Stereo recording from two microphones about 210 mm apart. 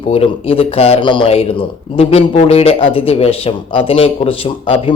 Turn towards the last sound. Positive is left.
turn(degrees=25)  # may be behind; listen again after turning